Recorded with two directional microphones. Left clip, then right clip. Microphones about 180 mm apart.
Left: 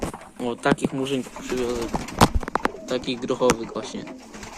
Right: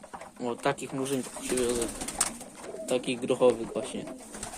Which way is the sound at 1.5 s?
15° right (ahead or behind).